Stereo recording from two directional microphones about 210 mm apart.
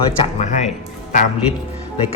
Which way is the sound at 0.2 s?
30° left (ahead or behind).